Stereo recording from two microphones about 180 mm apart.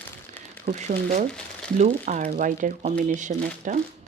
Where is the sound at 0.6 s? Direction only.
40° right (ahead or behind).